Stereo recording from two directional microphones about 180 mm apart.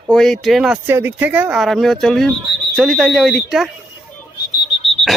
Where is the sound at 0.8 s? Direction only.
10° right (ahead or behind).